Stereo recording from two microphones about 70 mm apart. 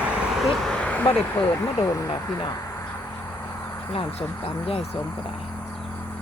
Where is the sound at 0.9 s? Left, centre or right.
Left.